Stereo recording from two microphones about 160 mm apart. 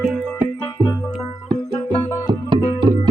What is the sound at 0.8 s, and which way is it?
Music, 25° left (ahead or behind).